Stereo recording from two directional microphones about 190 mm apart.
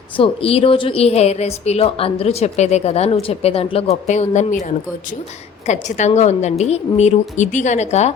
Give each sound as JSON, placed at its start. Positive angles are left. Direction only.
{"t": 0.2, "sound": "a woman's voice", "side_deg": 30}